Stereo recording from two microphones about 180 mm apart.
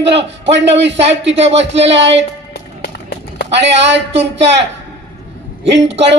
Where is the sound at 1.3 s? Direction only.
35° right (ahead or behind).